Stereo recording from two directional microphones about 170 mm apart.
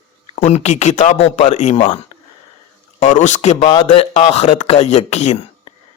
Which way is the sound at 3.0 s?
45° left (ahead or behind).